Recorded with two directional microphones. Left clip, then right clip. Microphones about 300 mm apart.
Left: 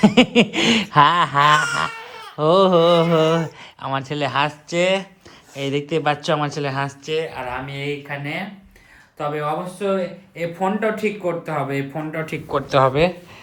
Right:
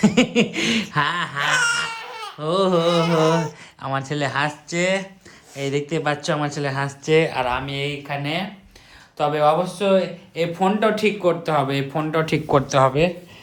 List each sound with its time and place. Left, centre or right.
0.0 s speech: centre
7.2 s speech: right
7.7 s speech: centre
12.9 s speech: centre